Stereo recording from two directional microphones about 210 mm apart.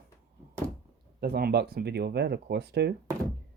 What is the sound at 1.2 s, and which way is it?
Speech, 50° right (ahead or behind).